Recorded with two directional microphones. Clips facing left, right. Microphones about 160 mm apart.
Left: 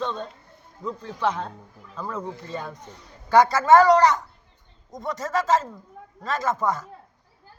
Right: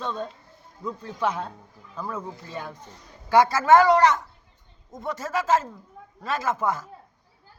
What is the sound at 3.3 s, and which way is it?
Speech, 10° right (ahead or behind).